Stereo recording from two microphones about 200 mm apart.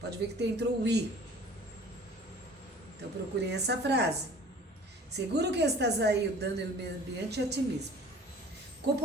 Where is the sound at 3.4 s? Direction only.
55° right (ahead or behind).